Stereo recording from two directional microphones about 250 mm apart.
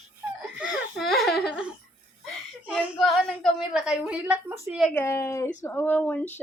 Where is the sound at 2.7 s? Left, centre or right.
Centre.